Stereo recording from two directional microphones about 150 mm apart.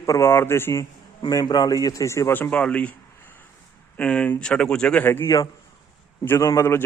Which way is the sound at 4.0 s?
10° left (ahead or behind).